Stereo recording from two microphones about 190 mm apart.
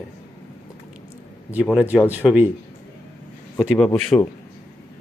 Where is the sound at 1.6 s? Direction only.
5° right (ahead or behind).